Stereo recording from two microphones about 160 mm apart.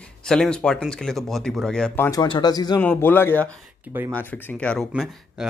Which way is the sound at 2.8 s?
10° left (ahead or behind).